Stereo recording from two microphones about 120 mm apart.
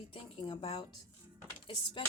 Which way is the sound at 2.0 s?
40° left (ahead or behind).